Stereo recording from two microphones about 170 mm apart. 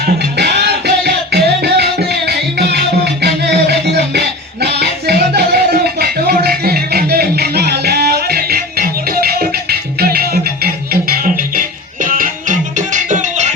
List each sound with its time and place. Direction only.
0.3 s music: 75° right (ahead or behind); by 13.5 s 45° right (ahead or behind)